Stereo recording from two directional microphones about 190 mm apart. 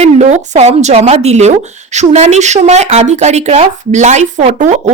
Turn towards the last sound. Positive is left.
turn(degrees=-35)  # may be behind; listen again after turning